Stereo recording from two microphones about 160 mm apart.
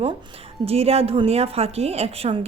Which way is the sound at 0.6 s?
40° right (ahead or behind).